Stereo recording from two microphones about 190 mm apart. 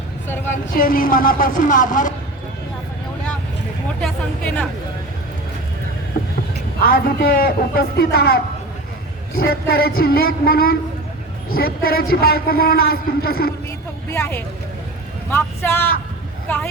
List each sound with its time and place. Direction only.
0.5 s a man's voice: 50° left (ahead or behind)
4.0 s speech: 5° left (ahead or behind)
6.8 s a man's voice: 50° left (ahead or behind)
14.1 s speech: 10° left (ahead or behind)